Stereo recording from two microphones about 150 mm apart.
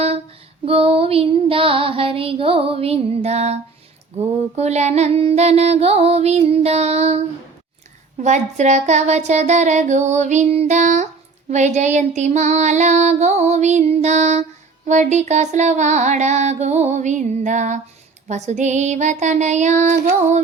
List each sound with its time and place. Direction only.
0.6 s female singing: 40° right (ahead or behind)
4.1 s child singing: 45° right (ahead or behind)